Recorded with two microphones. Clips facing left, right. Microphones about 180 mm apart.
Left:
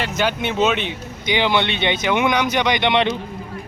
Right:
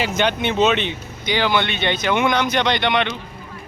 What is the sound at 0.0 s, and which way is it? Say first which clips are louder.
Speech: right 1 dB; 5° left (ahead or behind).